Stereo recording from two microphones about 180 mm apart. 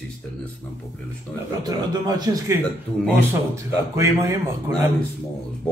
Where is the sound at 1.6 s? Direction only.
20° right (ahead or behind).